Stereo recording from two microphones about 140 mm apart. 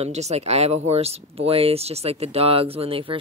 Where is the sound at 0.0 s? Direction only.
50° right (ahead or behind).